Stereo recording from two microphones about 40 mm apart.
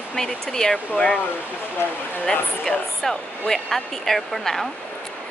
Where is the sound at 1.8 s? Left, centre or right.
Left.